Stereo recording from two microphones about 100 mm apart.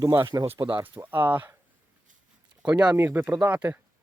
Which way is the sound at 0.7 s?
20° right (ahead or behind).